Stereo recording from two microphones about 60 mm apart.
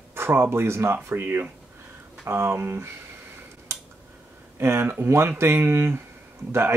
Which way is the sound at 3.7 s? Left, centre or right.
Right.